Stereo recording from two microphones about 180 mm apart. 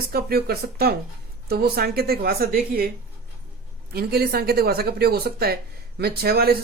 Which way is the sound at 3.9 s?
60° right (ahead or behind).